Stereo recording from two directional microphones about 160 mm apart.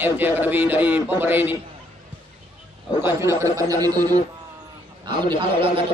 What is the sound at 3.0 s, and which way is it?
A man's voice, 15° right (ahead or behind).